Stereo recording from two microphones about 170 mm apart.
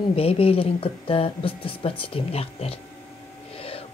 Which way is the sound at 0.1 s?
35° left (ahead or behind).